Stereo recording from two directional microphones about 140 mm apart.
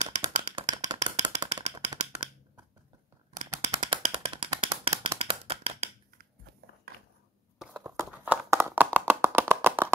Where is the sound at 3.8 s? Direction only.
40° right (ahead or behind).